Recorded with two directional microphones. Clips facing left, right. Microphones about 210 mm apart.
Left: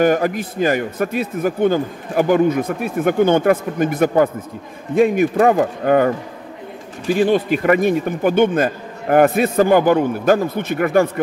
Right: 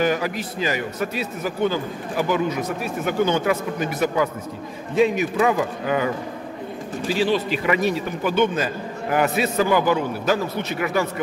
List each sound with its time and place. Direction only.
0.0 s a man's voice: 50° left (ahead or behind)